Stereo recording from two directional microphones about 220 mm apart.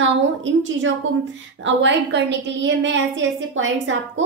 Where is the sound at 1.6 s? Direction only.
55° right (ahead or behind).